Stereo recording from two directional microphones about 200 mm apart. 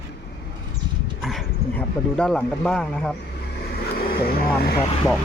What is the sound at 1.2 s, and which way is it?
Dog, centre (ahead or behind).